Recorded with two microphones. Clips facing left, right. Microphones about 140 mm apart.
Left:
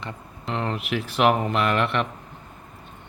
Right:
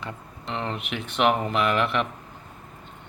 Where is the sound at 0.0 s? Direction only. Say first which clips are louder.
Left 1 dB; centre (ahead or behind).